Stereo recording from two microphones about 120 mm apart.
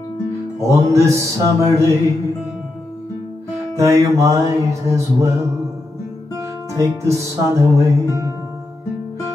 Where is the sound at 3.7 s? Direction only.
25° right (ahead or behind).